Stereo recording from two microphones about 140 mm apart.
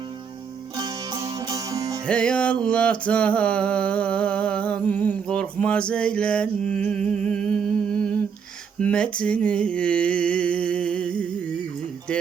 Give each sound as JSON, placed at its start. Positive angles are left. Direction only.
{"t": 0.8, "sound": "music", "side_deg": -25}
{"t": 2.0, "sound": "music", "side_deg": 5}